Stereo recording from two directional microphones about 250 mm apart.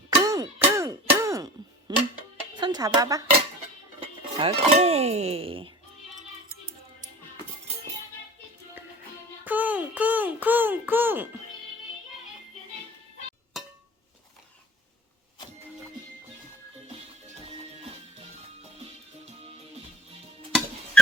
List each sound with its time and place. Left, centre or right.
0.2 s a sound: centre
1.9 s music: centre
2.6 s speech: centre
9.4 s a child's voice: centre